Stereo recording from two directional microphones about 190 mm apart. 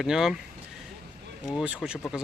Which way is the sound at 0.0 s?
Centre (ahead or behind).